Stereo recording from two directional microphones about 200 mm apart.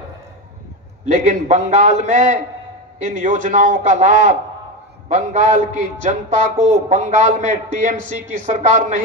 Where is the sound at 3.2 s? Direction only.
40° right (ahead or behind).